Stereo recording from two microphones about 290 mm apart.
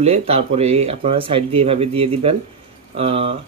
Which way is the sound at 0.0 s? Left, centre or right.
Right.